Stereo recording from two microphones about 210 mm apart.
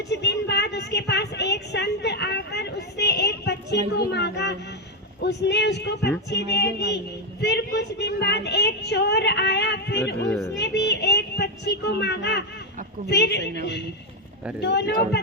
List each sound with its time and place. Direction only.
0.1 s a sound: 55° left (ahead or behind)
5.2 s a woman's voice: 55° left (ahead or behind)
14.6 s a woman's voice: 55° left (ahead or behind)